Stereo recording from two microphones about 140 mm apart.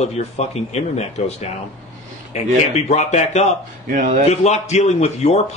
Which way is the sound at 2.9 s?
55° left (ahead or behind).